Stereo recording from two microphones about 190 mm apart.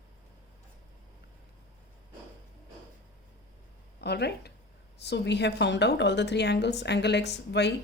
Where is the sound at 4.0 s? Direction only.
60° left (ahead or behind).